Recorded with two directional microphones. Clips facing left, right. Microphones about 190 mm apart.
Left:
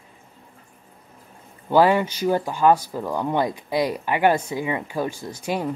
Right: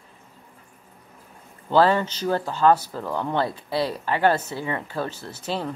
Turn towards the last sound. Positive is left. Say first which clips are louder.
# left 3 dB
turn(degrees=10)  # may be behind; listen again after turning